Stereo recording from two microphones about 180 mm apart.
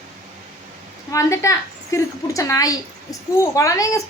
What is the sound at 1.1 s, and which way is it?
A woman's voice, 15° left (ahead or behind).